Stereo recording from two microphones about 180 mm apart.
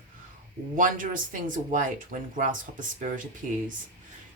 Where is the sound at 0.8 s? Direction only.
45° right (ahead or behind).